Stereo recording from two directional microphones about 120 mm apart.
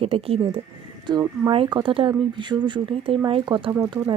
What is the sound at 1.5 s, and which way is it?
Speech, 50° right (ahead or behind).